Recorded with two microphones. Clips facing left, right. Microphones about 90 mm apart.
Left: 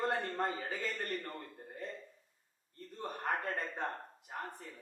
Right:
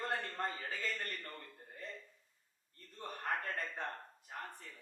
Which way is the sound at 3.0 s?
25° left (ahead or behind).